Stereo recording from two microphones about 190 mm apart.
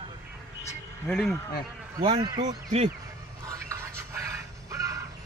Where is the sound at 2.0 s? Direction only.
25° right (ahead or behind).